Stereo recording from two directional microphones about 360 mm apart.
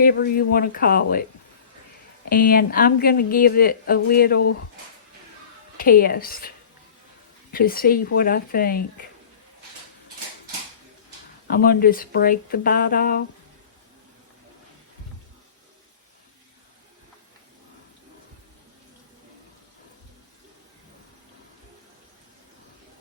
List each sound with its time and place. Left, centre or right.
0.0 s speech: left
2.3 s speech: left
5.7 s speech: left
7.5 s speech: left
11.4 s speech: left